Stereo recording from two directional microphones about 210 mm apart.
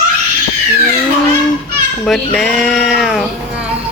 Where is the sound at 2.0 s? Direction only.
Centre (ahead or behind).